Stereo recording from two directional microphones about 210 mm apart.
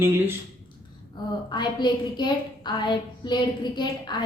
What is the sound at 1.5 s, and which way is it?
A woman's voice, 20° left (ahead or behind).